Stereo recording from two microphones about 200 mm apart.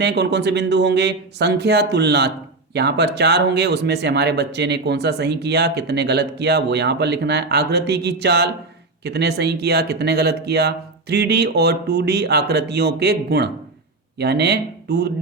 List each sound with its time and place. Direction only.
0.0 s speech: 55° right (ahead or behind)